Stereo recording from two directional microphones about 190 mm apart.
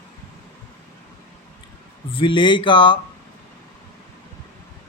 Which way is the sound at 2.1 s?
25° left (ahead or behind).